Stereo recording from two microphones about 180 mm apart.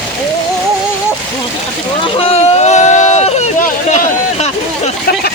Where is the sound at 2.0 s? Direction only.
35° left (ahead or behind).